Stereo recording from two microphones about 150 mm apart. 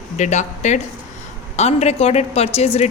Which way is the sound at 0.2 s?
50° left (ahead or behind).